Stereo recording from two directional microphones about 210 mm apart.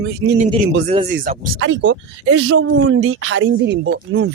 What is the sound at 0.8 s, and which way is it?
Speech, 35° right (ahead or behind).